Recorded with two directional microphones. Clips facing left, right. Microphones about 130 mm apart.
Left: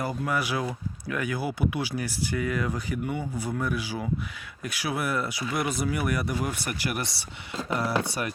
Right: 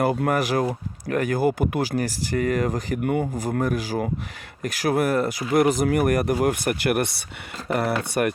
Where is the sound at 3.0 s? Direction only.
60° right (ahead or behind).